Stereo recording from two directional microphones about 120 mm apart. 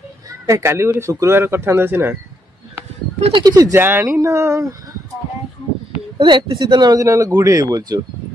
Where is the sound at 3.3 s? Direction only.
35° right (ahead or behind).